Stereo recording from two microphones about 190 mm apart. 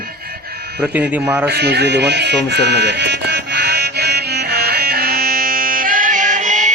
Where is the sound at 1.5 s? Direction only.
60° right (ahead or behind).